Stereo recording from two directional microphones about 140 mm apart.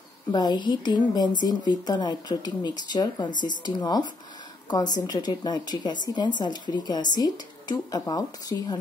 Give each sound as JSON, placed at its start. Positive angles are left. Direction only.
{"t": 0.3, "sound": "a woman's voice", "side_deg": 30}